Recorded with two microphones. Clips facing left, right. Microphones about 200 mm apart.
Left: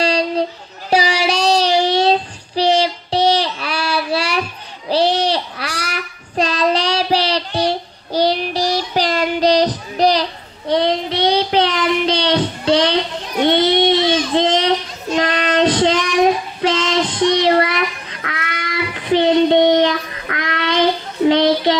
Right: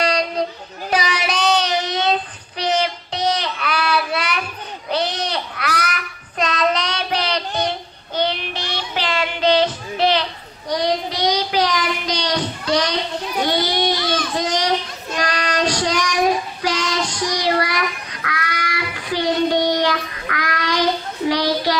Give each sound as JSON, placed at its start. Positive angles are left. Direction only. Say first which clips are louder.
{"t": 0.0, "sound": "child singing", "louder": "left 3 dB", "side_deg": 30}
{"t": 10.7, "sound": "child singing", "louder": "left 4 dB", "side_deg": 25}
{"t": 21.3, "sound": "a sound", "louder": "left 6 dB", "side_deg": 25}